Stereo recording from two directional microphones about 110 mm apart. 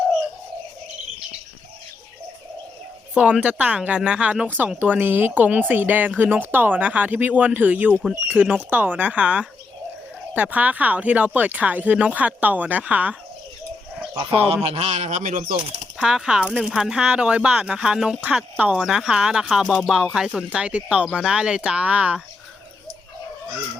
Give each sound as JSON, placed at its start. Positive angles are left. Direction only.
{"t": 3.2, "sound": "speech", "side_deg": -10}
{"t": 7.9, "sound": "speech", "side_deg": 0}
{"t": 8.3, "sound": "speech", "side_deg": -15}
{"t": 14.4, "sound": "a man's voice", "side_deg": -65}
{"t": 16.0, "sound": "speech", "side_deg": -5}